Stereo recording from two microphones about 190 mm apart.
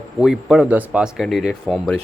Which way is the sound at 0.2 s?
5° right (ahead or behind).